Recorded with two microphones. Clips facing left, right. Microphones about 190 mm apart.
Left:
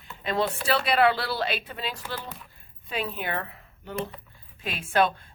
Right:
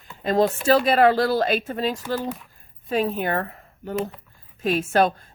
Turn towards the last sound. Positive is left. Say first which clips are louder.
# right 4 dB
turn(degrees=-40)  # may be behind; listen again after turning